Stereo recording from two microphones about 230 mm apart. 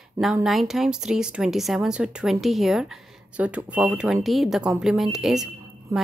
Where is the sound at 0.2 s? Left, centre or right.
Centre.